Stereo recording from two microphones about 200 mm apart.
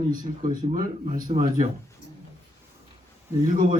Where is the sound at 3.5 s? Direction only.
40° right (ahead or behind).